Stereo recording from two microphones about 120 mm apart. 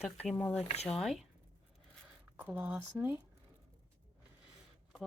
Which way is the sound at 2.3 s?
15° right (ahead or behind).